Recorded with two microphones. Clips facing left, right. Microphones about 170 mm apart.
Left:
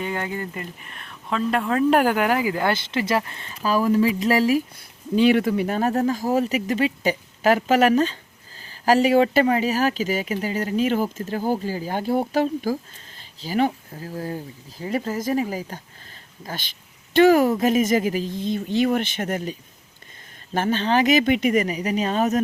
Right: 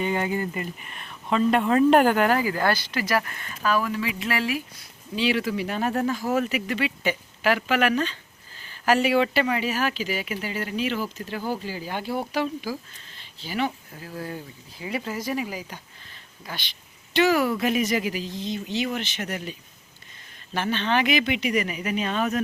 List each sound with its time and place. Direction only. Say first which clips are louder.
0.0 s speech: right 2 dB; 5° right (ahead or behind); by 4.6 s 40° left (ahead or behind)
4.8 s speech: left 8 dB; 50° left (ahead or behind)